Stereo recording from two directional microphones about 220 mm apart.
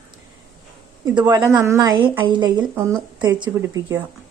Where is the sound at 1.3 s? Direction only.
15° right (ahead or behind).